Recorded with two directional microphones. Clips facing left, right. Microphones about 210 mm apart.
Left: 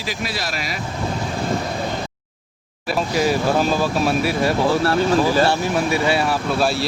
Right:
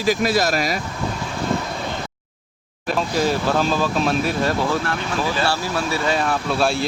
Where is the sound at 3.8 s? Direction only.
10° left (ahead or behind).